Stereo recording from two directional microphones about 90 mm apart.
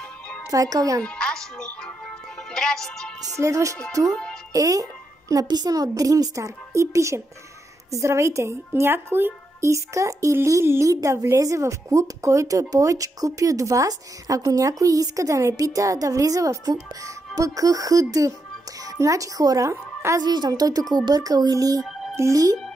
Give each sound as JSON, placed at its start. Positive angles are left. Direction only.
{"t": 0.5, "sound": "speech", "side_deg": -40}
{"t": 1.0, "sound": "speech", "side_deg": 10}
{"t": 3.3, "sound": "speech", "side_deg": -35}
{"t": 4.1, "sound": "speech", "side_deg": 10}
{"t": 4.5, "sound": "a woman's voice", "side_deg": -40}
{"t": 20.2, "sound": "speech", "side_deg": -50}